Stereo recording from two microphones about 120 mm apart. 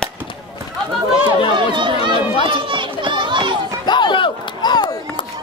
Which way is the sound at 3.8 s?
40° left (ahead or behind).